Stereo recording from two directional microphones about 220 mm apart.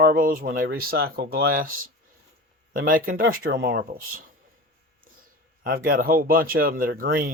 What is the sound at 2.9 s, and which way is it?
Speech, 40° right (ahead or behind).